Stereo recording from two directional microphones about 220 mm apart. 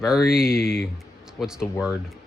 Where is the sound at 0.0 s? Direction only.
Centre (ahead or behind).